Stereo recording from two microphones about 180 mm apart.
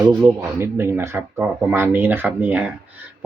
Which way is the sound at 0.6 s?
15° right (ahead or behind).